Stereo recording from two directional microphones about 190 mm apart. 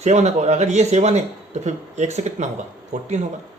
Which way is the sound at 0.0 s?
35° right (ahead or behind).